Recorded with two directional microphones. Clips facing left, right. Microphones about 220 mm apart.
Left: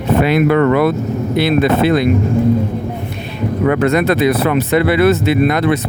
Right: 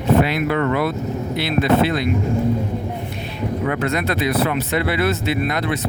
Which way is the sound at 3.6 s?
65° left (ahead or behind).